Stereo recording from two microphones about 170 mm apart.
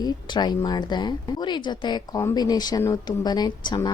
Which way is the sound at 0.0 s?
25° left (ahead or behind).